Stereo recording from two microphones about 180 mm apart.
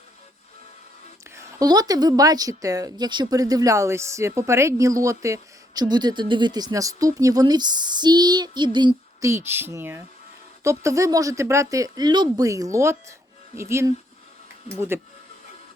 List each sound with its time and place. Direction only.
1.4 s speech: 20° right (ahead or behind)